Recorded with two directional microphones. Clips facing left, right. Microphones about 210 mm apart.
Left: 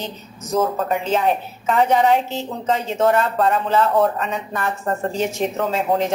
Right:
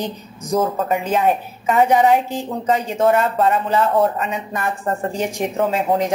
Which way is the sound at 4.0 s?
10° right (ahead or behind).